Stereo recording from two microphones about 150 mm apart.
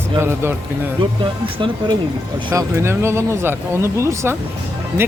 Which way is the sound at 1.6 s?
35° right (ahead or behind).